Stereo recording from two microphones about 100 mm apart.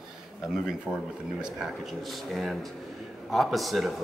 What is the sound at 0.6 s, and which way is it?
Speech, 5° right (ahead or behind).